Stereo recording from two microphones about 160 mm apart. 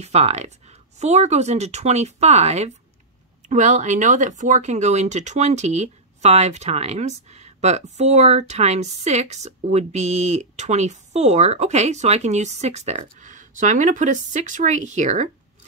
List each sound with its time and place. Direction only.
0.0 s speech: 40° right (ahead or behind)